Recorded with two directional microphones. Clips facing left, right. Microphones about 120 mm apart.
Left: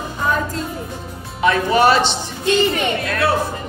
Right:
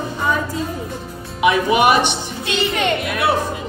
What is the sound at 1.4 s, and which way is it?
Speech, 15° right (ahead or behind).